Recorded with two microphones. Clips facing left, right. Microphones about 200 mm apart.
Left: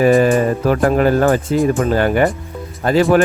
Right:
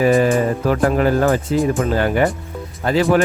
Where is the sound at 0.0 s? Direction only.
50° left (ahead or behind).